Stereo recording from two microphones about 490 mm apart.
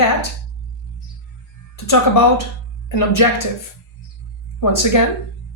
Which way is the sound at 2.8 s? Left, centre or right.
Left.